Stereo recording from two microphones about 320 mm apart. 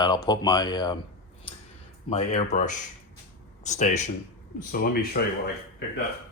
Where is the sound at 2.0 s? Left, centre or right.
Centre.